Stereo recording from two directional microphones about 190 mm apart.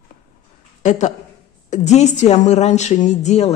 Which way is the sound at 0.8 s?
40° left (ahead or behind).